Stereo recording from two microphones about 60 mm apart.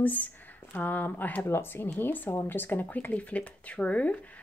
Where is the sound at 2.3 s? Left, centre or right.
Left.